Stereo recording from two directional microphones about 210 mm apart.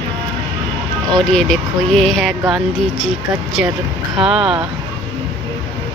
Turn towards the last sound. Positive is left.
turn(degrees=-5)  # may be behind; listen again after turning